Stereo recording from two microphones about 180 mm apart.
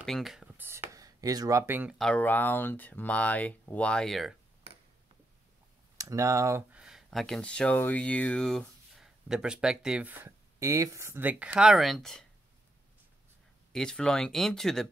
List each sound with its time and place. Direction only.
0.0 s speech: centre (ahead or behind)
2.0 s speech: 5° left (ahead or behind)
5.9 s speech: 15° right (ahead or behind)
6.8 s speech: centre (ahead or behind)
13.7 s speech: 5° left (ahead or behind)